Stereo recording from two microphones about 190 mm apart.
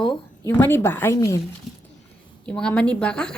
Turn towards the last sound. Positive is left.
turn(degrees=5)  # may be behind; listen again after turning